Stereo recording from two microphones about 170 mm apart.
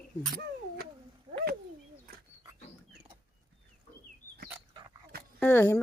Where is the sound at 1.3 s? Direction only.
35° right (ahead or behind).